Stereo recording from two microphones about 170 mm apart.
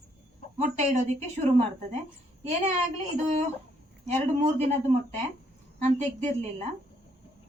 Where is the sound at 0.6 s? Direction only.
45° right (ahead or behind).